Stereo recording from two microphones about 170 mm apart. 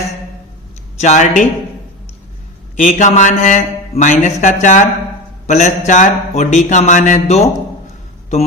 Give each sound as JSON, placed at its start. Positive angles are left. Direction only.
{"t": 0.9, "sound": "a man's voice", "side_deg": 45}
{"t": 2.7, "sound": "a man's voice", "side_deg": 45}